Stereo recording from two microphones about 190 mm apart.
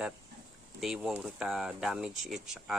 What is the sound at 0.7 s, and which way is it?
Speech, centre (ahead or behind).